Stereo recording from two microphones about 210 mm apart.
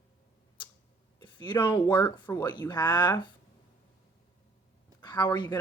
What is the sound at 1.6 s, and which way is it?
Speech, 20° left (ahead or behind).